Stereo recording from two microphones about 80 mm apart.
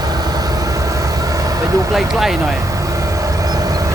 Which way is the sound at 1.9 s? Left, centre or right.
Centre.